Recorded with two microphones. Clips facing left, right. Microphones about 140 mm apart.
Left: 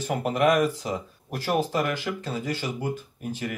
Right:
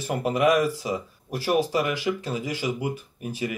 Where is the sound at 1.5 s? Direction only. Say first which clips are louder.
Right 2 dB; 10° right (ahead or behind).